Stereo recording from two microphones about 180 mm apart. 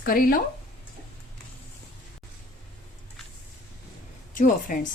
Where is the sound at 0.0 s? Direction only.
55° left (ahead or behind).